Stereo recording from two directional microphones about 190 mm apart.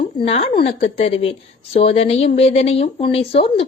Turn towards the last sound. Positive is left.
turn(degrees=30)  # may be behind; listen again after turning